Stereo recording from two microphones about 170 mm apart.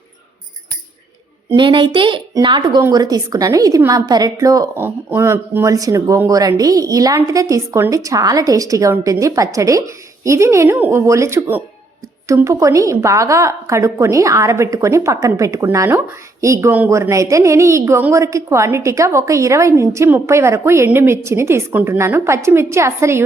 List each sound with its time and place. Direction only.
1.5 s a woman's voice: 30° right (ahead or behind)